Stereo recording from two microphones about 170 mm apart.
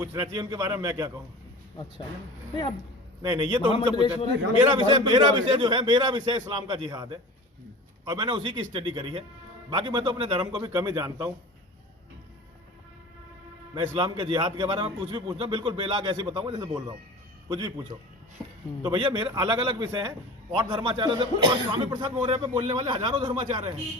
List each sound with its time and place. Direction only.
0.0 s a man's voice: 20° right (ahead or behind)
3.2 s a man's voice: 25° right (ahead or behind)
3.7 s a man's voice: 30° left (ahead or behind)
4.7 s a man's voice: 25° right (ahead or behind)
13.7 s a man's voice: 25° right (ahead or behind)